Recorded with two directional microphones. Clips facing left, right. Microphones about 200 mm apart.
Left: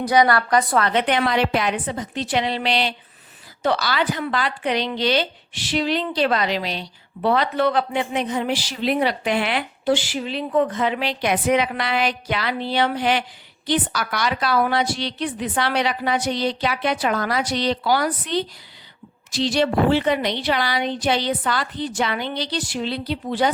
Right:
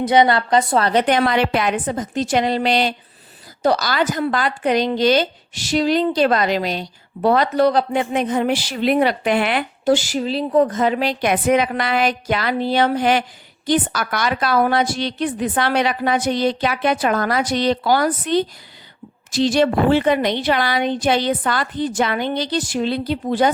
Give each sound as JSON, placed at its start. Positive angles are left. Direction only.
{"t": 0.0, "sound": "a woman's voice", "side_deg": -25}